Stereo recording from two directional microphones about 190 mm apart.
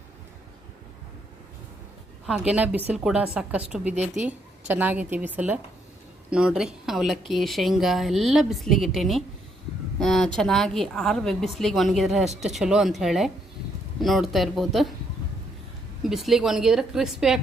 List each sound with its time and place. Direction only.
2.2 s a woman's voice: 5° right (ahead or behind)
3.9 s speech: 35° right (ahead or behind)
4.7 s a woman's voice: 10° right (ahead or behind)
16.0 s a woman's voice: centre (ahead or behind)